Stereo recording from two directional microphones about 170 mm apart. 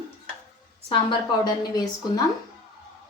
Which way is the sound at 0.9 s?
25° left (ahead or behind).